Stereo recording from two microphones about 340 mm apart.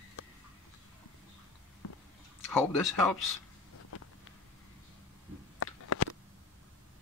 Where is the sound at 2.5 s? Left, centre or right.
Centre.